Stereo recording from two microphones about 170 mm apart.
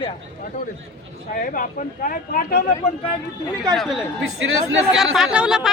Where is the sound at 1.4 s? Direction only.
55° left (ahead or behind).